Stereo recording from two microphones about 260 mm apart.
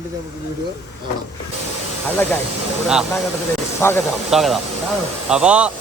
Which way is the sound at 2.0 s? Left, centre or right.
Centre.